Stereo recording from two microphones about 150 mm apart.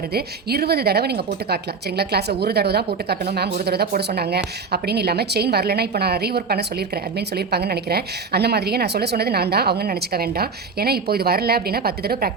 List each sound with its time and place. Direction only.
0.1 s speech: 90° right